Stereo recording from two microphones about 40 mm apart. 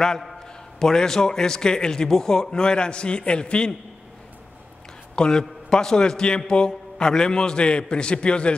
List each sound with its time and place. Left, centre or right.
0.7 s a man's voice: centre
5.1 s a man's voice: left